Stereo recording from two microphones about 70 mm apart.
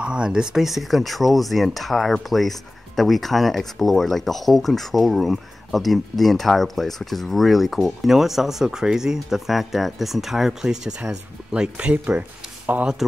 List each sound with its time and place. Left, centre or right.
0.0 s speech: centre